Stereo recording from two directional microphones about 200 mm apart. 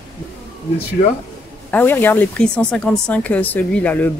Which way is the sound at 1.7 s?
10° left (ahead or behind).